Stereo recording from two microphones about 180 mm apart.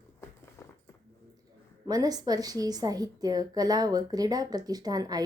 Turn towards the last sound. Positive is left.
turn(degrees=-20)  # may be behind; listen again after turning